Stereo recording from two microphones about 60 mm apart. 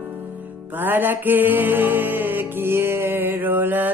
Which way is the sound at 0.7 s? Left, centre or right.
Right.